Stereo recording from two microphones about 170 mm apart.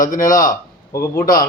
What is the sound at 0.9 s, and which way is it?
Speech, 15° left (ahead or behind).